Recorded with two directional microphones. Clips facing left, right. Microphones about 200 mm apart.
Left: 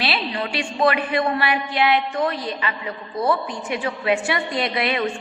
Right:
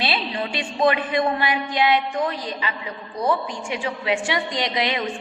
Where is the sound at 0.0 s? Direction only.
20° right (ahead or behind).